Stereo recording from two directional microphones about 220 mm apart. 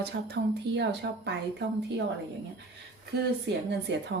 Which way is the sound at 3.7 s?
55° right (ahead or behind).